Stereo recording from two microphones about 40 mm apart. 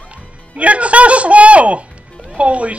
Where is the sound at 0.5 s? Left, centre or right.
Right.